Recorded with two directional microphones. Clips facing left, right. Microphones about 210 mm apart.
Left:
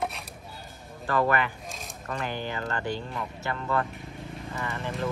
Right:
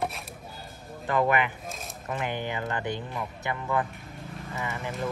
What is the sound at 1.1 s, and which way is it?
Speech, 20° right (ahead or behind).